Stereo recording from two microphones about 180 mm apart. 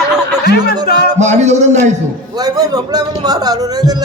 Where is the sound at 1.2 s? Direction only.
40° right (ahead or behind).